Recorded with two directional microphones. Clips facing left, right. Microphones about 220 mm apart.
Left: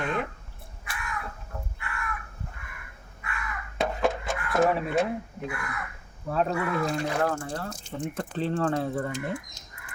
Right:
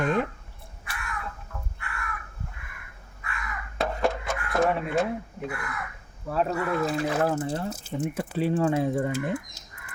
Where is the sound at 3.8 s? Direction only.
Centre (ahead or behind).